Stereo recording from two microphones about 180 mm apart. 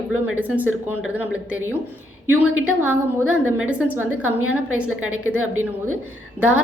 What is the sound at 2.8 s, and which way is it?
A woman's voice, 5° right (ahead or behind).